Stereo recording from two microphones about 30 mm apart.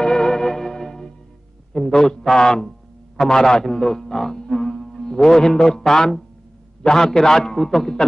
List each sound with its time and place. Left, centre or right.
0.0 s music: left
1.7 s a man's voice: centre
7.5 s a man's voice: centre